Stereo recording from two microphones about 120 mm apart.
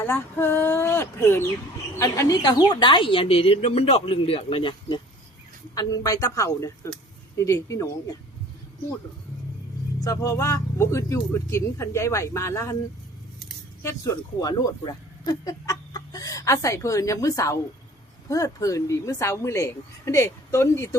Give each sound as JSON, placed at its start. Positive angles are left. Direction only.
{"t": 0.0, "sound": "a woman's voice", "side_deg": 20}
{"t": 5.7, "sound": "speech", "side_deg": 30}
{"t": 10.0, "sound": "speech", "side_deg": 25}
{"t": 13.8, "sound": "speech", "side_deg": 25}